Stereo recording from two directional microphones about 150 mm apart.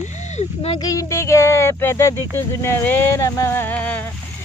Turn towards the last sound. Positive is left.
turn(degrees=10)  # may be behind; listen again after turning